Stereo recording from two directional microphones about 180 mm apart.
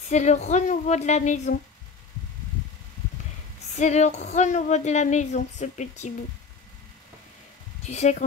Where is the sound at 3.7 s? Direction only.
40° left (ahead or behind).